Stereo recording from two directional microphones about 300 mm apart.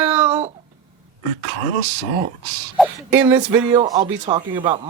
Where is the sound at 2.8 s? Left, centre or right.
Centre.